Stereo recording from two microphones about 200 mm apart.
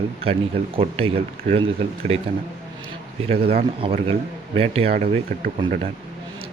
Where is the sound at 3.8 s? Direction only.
30° right (ahead or behind).